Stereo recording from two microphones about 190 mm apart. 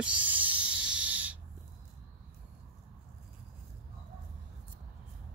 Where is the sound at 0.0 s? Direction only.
5° right (ahead or behind).